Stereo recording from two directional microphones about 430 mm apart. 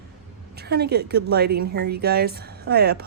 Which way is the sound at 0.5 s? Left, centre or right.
Right.